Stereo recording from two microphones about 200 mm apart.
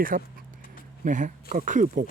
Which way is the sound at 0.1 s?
40° right (ahead or behind).